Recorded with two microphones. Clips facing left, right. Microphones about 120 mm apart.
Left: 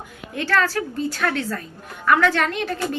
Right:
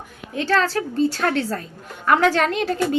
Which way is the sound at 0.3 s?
25° right (ahead or behind).